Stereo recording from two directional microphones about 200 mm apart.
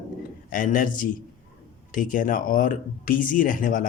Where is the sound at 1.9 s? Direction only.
45° left (ahead or behind).